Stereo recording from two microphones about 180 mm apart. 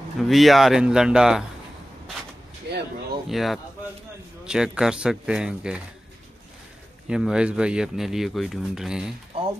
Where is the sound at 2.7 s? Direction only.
70° right (ahead or behind).